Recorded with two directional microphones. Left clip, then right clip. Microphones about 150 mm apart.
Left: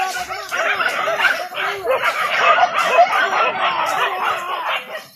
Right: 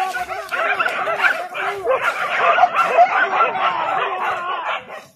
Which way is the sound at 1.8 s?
25° right (ahead or behind).